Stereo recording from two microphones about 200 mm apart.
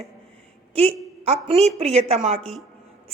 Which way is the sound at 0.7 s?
30° right (ahead or behind).